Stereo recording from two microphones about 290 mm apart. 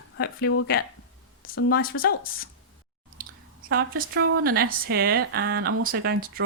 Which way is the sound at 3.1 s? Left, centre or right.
Right.